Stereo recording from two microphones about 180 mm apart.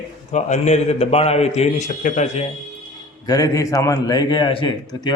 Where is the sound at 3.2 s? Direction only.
20° left (ahead or behind).